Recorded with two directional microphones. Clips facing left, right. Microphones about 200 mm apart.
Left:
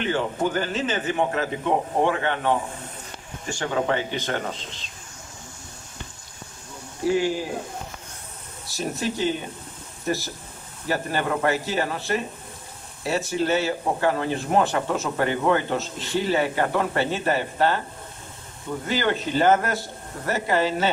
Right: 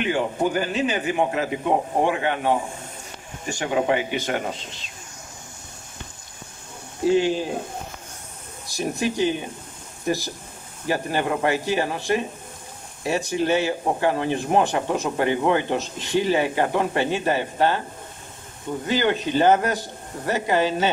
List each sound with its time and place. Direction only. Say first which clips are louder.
0.0 s speech: right 2 dB; 15° right (ahead or behind)
7.1 s speech: right 3 dB; 20° right (ahead or behind)
8.6 s speech: right 3 dB; 15° right (ahead or behind)
18.9 s speech: right 3 dB; 20° right (ahead or behind)